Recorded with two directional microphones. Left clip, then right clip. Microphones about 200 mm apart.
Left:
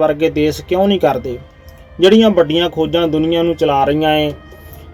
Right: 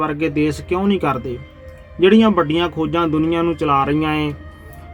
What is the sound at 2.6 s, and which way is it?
Speech, 45° right (ahead or behind).